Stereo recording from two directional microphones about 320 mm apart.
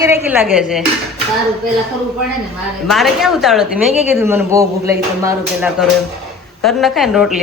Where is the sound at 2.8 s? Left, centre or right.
Centre.